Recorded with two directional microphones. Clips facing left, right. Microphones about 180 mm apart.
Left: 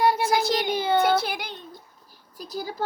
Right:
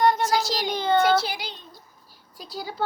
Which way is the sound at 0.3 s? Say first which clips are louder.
Left 2 dB; 55° left (ahead or behind).